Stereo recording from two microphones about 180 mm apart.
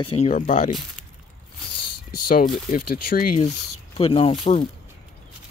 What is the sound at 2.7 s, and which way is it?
Speech, 55° left (ahead or behind).